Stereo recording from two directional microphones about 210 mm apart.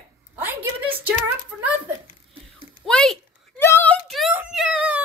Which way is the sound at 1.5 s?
Centre (ahead or behind).